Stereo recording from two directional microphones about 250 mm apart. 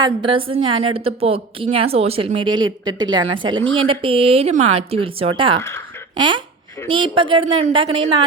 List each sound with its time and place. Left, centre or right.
0.0 s a woman's voice: centre